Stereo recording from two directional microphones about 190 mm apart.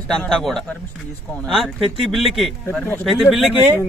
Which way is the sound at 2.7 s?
10° left (ahead or behind).